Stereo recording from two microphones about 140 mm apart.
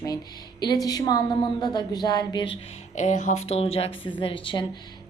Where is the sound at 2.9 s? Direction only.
55° left (ahead or behind).